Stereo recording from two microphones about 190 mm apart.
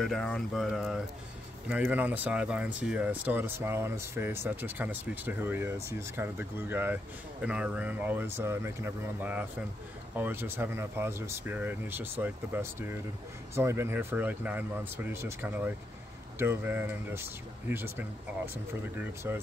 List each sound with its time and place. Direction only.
0.0 s speech: 5° left (ahead or behind)